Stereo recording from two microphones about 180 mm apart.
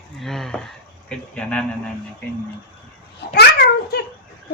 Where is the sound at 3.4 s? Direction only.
65° left (ahead or behind).